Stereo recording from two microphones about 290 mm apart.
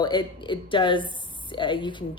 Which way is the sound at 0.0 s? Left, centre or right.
Centre.